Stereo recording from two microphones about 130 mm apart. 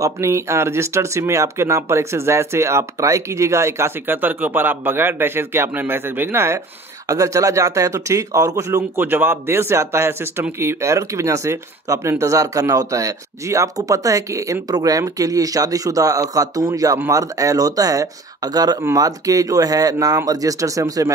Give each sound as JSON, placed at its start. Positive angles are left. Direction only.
{"t": 0.0, "sound": "speech", "side_deg": -20}